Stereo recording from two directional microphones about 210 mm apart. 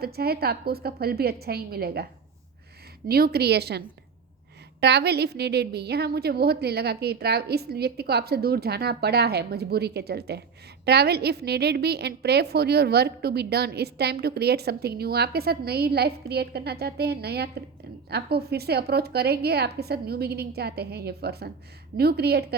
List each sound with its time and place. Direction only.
0.0 s a woman's voice: 45° right (ahead or behind)
3.1 s a woman's voice: 45° right (ahead or behind)